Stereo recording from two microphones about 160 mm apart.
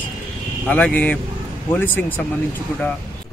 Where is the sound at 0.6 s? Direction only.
10° left (ahead or behind).